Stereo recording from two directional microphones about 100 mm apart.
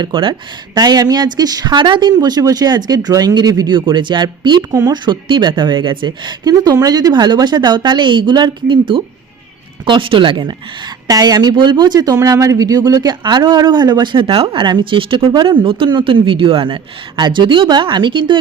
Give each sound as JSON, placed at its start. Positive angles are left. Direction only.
{"t": 0.0, "sound": "speech", "side_deg": -55}
{"t": 3.8, "sound": "a man's voice", "side_deg": -55}
{"t": 11.1, "sound": "a man's voice", "side_deg": -40}